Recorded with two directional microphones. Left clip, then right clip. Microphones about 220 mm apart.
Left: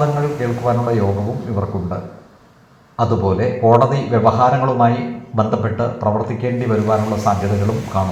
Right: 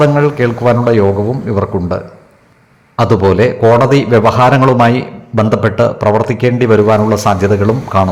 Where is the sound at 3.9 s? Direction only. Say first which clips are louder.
Right 6 dB; 40° right (ahead or behind).